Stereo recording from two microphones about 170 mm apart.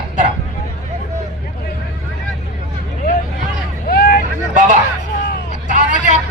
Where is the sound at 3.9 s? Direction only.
60° left (ahead or behind).